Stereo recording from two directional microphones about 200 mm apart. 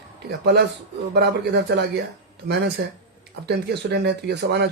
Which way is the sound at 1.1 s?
55° right (ahead or behind).